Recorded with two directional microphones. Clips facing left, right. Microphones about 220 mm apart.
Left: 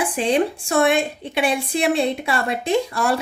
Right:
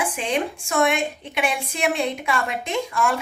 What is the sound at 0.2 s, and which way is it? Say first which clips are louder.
A woman's voice: left 6 dB; 35° left (ahead or behind).